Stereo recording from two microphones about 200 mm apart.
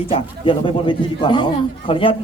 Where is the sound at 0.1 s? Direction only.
25° left (ahead or behind).